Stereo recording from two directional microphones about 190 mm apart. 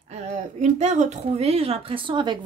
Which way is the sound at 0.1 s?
35° right (ahead or behind).